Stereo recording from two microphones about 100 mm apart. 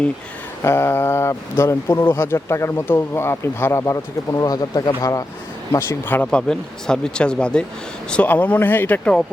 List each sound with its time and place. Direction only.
0.6 s speech: 25° left (ahead or behind)
6.1 s speech: 20° left (ahead or behind)
6.5 s speech: 5° left (ahead or behind)